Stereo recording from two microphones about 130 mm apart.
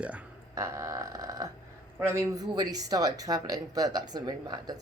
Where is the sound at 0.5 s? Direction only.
25° right (ahead or behind).